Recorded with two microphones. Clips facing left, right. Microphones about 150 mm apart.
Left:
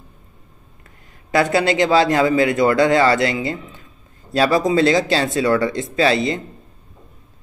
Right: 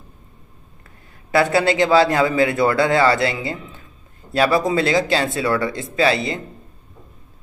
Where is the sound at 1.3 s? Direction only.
20° left (ahead or behind).